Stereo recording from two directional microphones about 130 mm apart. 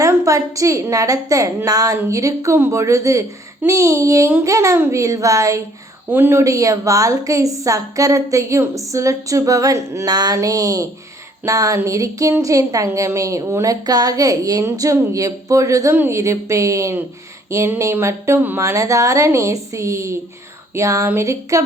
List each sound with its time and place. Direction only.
0.0 s a woman's voice: 25° right (ahead or behind)